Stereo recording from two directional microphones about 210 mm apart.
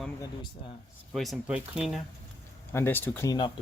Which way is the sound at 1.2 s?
Centre (ahead or behind).